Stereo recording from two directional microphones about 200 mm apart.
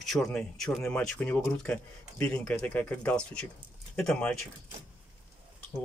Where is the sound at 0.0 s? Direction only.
Centre (ahead or behind).